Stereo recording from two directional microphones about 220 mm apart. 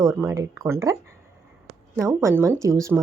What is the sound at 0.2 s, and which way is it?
Speech, 15° right (ahead or behind).